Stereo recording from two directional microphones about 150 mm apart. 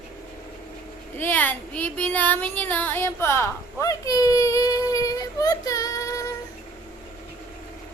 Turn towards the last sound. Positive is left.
turn(degrees=25)  # may be behind; listen again after turning